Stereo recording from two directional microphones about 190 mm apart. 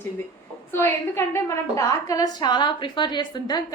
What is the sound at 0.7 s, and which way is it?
A woman's voice, 10° left (ahead or behind).